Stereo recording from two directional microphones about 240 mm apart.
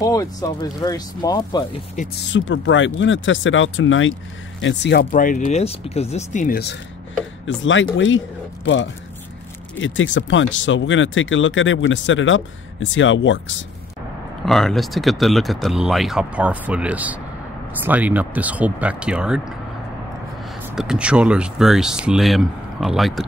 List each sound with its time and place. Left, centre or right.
0.0 s speech: centre
2.0 s speech: left
2.3 s speech: left
7.4 s speech: left
14.4 s speech: centre
20.7 s speech: centre